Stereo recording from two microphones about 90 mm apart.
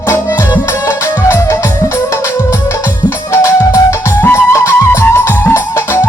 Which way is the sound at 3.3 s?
35° left (ahead or behind).